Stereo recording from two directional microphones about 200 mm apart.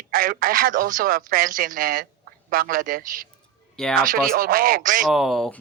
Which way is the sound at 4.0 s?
45° right (ahead or behind).